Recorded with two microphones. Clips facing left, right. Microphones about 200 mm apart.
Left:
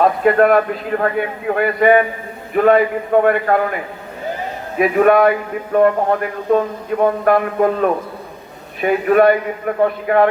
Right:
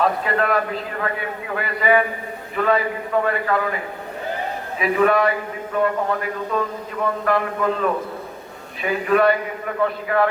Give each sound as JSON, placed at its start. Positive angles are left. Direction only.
{"t": 0.0, "sound": "a man's voice", "side_deg": 50}
{"t": 4.8, "sound": "a man's voice", "side_deg": 55}